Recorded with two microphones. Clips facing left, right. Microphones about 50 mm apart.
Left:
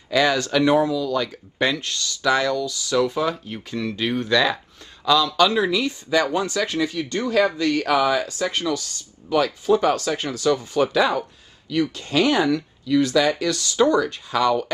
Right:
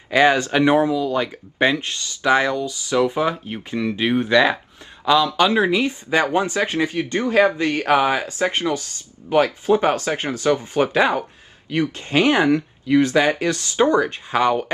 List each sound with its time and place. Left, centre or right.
0.1 s speech: right